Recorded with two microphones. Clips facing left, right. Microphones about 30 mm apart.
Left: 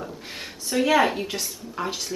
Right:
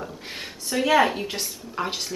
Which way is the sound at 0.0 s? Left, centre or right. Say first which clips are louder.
Even; centre.